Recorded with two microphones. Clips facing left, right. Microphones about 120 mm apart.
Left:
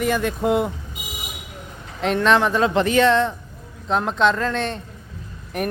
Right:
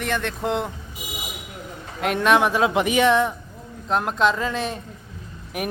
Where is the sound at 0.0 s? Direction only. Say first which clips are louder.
Left 5 dB; 5° left (ahead or behind).